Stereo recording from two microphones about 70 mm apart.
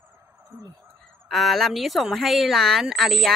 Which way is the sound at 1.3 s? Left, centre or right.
Centre.